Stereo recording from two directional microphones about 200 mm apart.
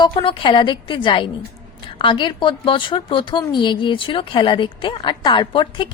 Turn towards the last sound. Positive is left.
turn(degrees=25)  # may be behind; listen again after turning